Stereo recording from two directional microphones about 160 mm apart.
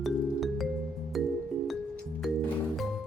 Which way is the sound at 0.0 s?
Centre (ahead or behind).